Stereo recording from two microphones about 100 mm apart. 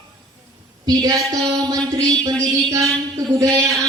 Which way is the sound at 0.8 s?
40° right (ahead or behind).